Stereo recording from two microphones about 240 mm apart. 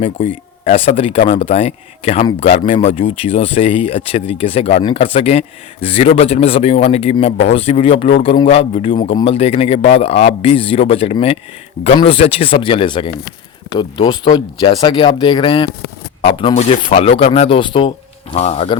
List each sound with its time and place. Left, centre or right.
0.0 s speech: left